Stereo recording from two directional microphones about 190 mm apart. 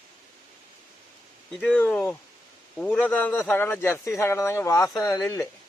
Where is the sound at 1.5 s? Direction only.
5° left (ahead or behind).